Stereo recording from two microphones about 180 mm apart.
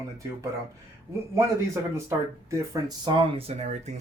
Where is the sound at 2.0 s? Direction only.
15° right (ahead or behind); by 4.0 s 40° right (ahead or behind).